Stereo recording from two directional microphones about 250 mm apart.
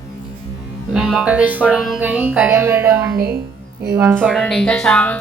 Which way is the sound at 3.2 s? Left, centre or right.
Right.